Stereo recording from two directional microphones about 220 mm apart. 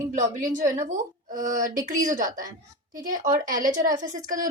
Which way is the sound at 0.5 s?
35° right (ahead or behind).